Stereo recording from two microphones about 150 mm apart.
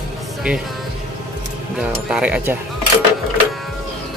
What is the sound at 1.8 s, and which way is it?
Speech, 5° right (ahead or behind).